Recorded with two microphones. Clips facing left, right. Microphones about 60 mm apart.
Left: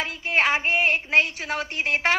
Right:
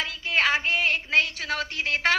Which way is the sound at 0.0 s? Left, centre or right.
Left.